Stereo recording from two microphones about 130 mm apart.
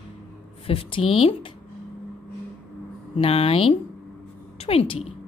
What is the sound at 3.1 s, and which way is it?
A woman's voice, 50° left (ahead or behind).